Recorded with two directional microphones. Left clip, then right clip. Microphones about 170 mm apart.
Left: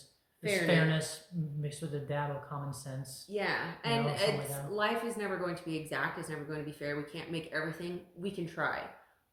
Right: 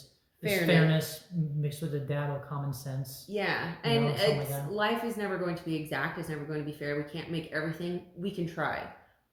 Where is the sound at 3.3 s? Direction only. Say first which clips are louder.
Right 2 dB; 20° left (ahead or behind).